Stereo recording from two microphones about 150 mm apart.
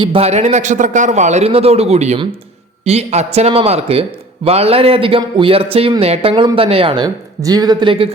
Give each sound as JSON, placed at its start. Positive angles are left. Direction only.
{"t": 0.0, "sound": "a man's voice", "side_deg": -40}